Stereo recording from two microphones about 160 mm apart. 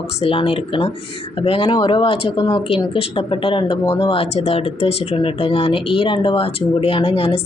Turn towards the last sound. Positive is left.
turn(degrees=35)  # may be behind; listen again after turning